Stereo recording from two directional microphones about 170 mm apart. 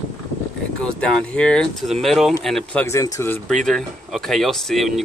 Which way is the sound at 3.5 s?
5° left (ahead or behind).